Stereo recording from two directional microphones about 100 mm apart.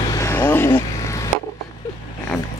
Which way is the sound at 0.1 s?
30° left (ahead or behind).